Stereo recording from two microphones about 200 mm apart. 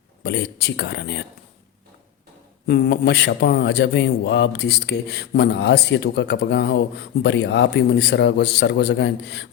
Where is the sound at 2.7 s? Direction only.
50° left (ahead or behind).